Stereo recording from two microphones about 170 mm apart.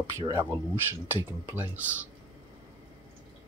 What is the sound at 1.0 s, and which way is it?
Speech, 10° right (ahead or behind).